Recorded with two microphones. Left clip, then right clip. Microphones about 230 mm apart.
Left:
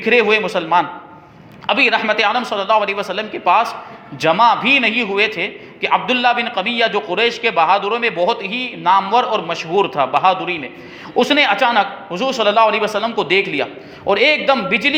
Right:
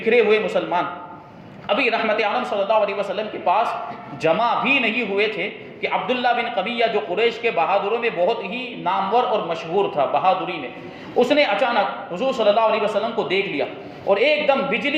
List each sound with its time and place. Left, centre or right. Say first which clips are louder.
0.0 s a man's voice: left 3 dB; left